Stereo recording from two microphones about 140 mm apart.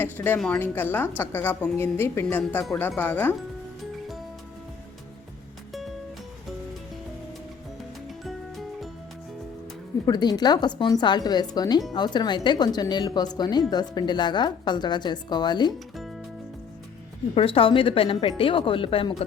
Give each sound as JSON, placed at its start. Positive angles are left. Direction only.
{"t": 0.0, "sound": "a woman's voice", "side_deg": 15}
{"t": 8.2, "sound": "music", "side_deg": 0}
{"t": 10.1, "sound": "speech", "side_deg": 30}
{"t": 17.3, "sound": "speech", "side_deg": 40}